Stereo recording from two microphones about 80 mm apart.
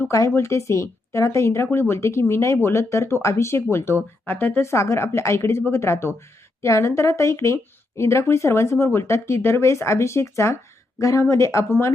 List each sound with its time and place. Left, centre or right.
0.1 s a woman's voice: left
4.7 s a woman's voice: left